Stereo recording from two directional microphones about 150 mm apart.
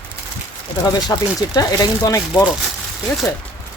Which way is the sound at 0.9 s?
25° left (ahead or behind).